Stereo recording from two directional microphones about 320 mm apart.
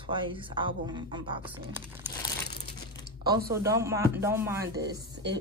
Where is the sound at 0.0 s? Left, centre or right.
Centre.